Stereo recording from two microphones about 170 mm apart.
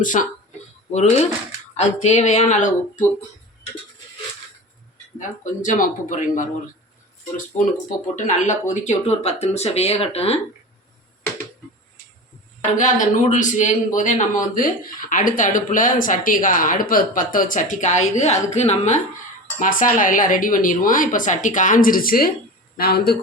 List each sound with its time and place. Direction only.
0.0 s speech: 50° left (ahead or behind)
5.4 s speech: 45° left (ahead or behind)
12.7 s speech: 50° left (ahead or behind)
19.5 s speech: 50° left (ahead or behind)